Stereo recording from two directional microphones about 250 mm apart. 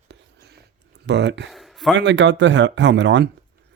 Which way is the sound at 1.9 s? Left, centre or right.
Right.